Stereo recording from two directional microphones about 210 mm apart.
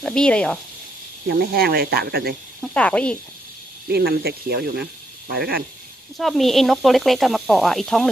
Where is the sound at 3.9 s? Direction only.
50° right (ahead or behind).